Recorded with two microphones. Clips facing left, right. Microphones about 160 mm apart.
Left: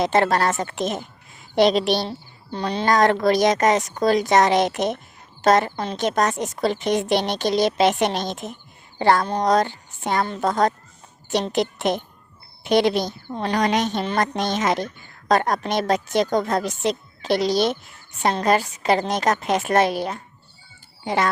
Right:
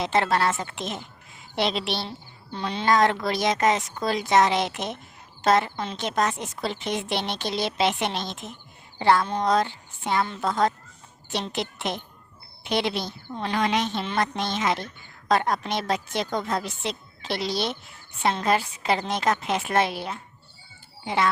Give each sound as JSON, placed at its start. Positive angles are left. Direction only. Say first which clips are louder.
{"t": 0.0, "sound": "a woman's voice", "louder": "left 4 dB", "side_deg": 45}